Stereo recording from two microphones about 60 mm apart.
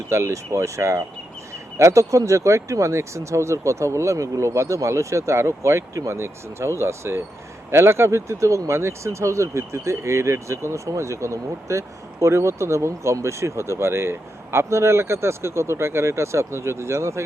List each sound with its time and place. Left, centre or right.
0.1 s speech: right